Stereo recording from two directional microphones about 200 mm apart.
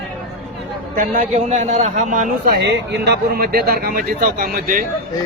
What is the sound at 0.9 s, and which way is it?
A man's voice, 45° right (ahead or behind).